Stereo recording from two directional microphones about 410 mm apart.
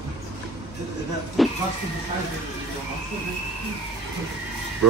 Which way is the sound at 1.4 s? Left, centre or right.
Centre.